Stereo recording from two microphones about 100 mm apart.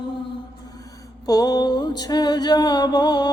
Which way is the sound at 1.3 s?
40° left (ahead or behind).